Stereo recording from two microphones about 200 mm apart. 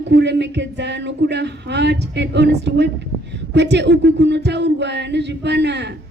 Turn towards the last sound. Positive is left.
turn(degrees=-60)  # may be behind; listen again after turning